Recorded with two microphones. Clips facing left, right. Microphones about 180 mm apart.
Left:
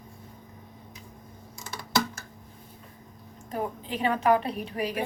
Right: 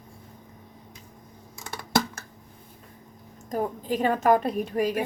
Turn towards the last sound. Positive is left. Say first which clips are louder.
# right 5 dB
turn(degrees=-45)  # may be behind; listen again after turning